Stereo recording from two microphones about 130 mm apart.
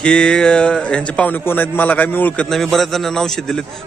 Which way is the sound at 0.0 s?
5° left (ahead or behind).